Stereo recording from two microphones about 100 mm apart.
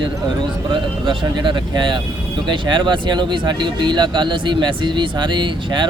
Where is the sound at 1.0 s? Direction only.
50° right (ahead or behind).